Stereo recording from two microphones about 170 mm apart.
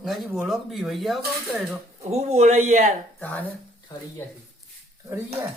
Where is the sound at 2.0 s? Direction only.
40° right (ahead or behind).